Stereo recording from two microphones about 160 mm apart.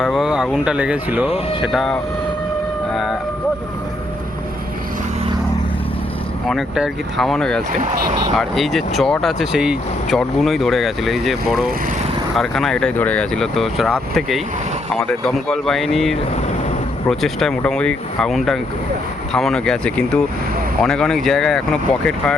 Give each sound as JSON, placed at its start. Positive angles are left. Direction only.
{"t": 0.0, "sound": "speech", "side_deg": 0}
{"t": 2.9, "sound": "music", "side_deg": 0}
{"t": 6.5, "sound": "speech", "side_deg": 0}
{"t": 7.7, "sound": "speech", "side_deg": -55}
{"t": 8.4, "sound": "speech", "side_deg": 0}